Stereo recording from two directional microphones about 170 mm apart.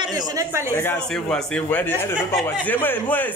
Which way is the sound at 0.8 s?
10° left (ahead or behind).